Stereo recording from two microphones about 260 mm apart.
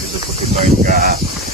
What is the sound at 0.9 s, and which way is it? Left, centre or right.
Speech, right.